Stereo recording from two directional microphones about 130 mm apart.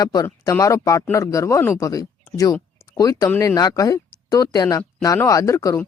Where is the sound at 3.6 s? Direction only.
25° left (ahead or behind).